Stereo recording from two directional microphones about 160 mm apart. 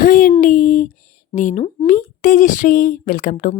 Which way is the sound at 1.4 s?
50° left (ahead or behind).